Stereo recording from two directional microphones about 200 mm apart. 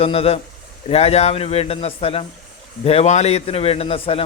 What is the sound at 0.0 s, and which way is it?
A man's voice, 30° left (ahead or behind).